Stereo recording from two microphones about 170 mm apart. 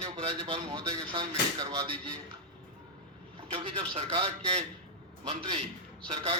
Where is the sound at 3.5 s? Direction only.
30° right (ahead or behind).